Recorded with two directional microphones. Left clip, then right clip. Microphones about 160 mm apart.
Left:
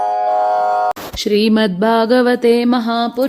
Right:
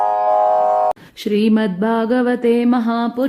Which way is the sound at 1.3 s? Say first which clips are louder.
Left 3 dB; 45° left (ahead or behind).